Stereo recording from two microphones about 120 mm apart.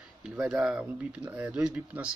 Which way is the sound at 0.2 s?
5° right (ahead or behind).